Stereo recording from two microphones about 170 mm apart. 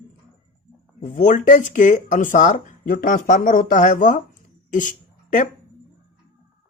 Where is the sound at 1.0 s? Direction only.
45° left (ahead or behind).